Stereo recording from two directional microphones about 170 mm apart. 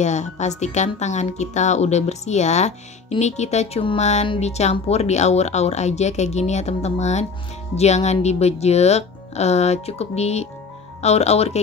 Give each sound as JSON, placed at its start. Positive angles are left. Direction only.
{"t": 0.0, "sound": "speech", "side_deg": 45}